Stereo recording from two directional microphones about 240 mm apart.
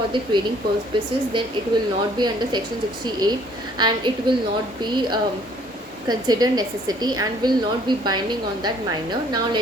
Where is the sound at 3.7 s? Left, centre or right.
Centre.